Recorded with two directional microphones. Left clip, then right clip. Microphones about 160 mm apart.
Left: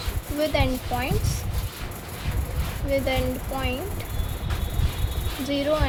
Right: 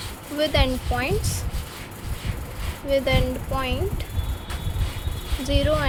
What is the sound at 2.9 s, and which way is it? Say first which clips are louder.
Speech: right 3 dB; 25° right (ahead or behind).